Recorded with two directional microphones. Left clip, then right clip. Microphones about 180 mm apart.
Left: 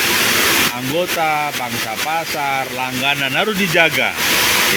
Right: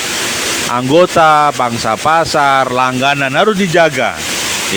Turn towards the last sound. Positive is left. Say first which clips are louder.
# right 4 dB
turn(degrees=-30)  # may be behind; listen again after turning